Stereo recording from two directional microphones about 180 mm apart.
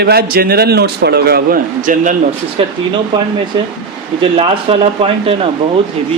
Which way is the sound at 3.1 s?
25° right (ahead or behind).